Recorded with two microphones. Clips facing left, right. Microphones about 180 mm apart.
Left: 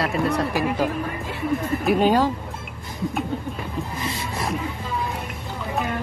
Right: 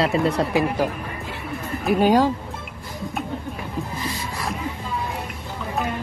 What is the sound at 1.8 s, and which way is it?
Speech, 10° right (ahead or behind).